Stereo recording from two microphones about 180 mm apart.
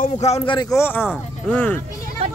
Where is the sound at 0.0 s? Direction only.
35° left (ahead or behind).